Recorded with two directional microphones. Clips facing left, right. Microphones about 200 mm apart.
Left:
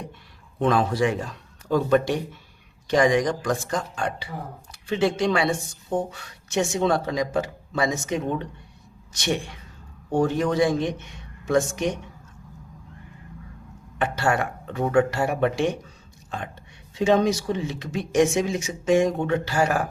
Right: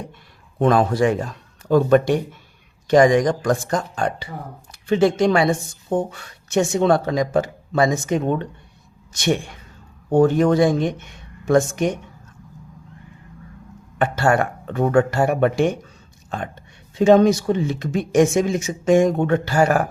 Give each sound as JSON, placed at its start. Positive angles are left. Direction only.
{"t": 0.6, "sound": "speech", "side_deg": -50}
{"t": 14.0, "sound": "speech", "side_deg": -50}
{"t": 16.9, "sound": "speech", "side_deg": -50}